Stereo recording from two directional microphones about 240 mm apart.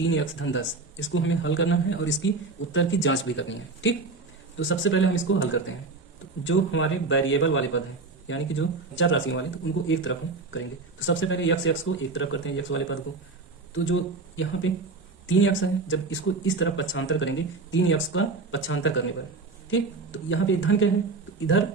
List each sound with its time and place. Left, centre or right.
0.1 s speech: left